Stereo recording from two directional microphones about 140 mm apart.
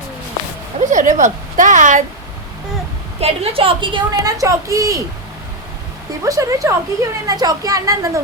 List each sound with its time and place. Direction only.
0.9 s a woman's voice: 65° right (ahead or behind)
3.2 s a woman's voice: 45° right (ahead or behind)
4.2 s a woman's voice: 25° right (ahead or behind)
6.2 s a woman's voice: 25° right (ahead or behind)